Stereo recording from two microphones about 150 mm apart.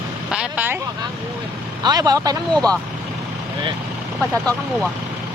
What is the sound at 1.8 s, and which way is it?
Speech, 25° right (ahead or behind).